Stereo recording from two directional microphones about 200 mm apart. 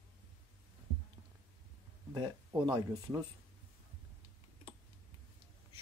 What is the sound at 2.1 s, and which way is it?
Speech, 20° right (ahead or behind).